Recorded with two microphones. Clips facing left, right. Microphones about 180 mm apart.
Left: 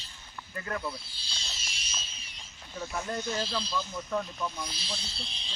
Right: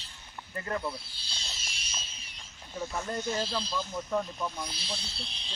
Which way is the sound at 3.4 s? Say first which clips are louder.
Even; 50° right (ahead or behind).